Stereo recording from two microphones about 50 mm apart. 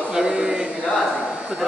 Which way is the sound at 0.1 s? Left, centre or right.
Centre.